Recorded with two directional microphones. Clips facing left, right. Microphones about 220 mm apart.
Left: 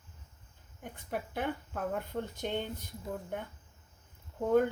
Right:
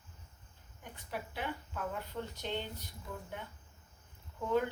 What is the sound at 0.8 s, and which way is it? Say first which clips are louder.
Speech: left 5 dB; 50° left (ahead or behind).